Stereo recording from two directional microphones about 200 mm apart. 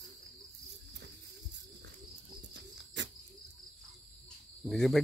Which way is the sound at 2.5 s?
60° right (ahead or behind).